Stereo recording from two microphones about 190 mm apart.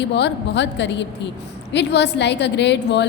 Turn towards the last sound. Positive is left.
turn(degrees=65)  # may be behind; listen again after turning